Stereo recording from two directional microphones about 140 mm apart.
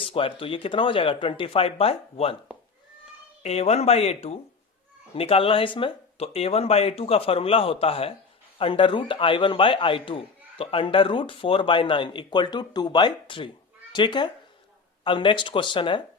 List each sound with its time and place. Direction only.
0.0 s a man's voice: 40° left (ahead or behind)
3.4 s a man's voice: 50° left (ahead or behind)